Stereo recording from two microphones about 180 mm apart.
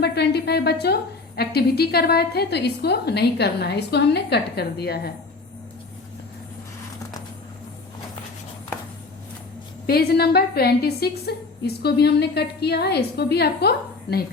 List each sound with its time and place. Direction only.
0.0 s a woman's voice: 65° left (ahead or behind)
9.8 s a woman's voice: 60° left (ahead or behind)